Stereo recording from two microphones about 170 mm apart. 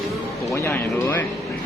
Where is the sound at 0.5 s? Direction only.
15° left (ahead or behind).